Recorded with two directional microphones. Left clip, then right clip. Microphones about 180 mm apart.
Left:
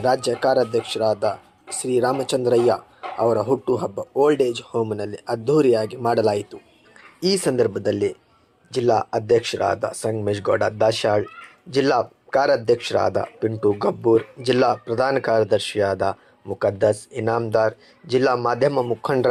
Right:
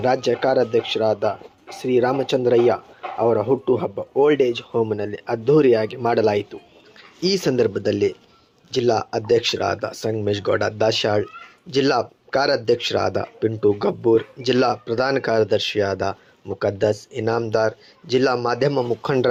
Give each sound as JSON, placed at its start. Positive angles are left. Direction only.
{"t": 0.0, "sound": "speech", "side_deg": -5}
{"t": 7.2, "sound": "speech", "side_deg": -15}